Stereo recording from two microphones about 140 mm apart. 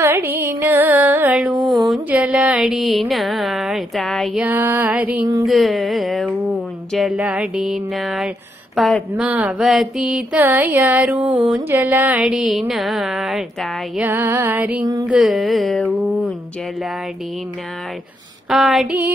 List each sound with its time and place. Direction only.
0.0 s music: 15° right (ahead or behind)
2.0 s a sound: 10° right (ahead or behind)
3.1 s speech: centre (ahead or behind)
4.5 s mantra: 15° right (ahead or behind)
5.5 s speech: centre (ahead or behind)
9.2 s mantra: 10° right (ahead or behind)
12.2 s speech: 5° right (ahead or behind)
14.0 s mantra: 15° right (ahead or behind)
15.0 s speech: centre (ahead or behind)
18.5 s speech: centre (ahead or behind)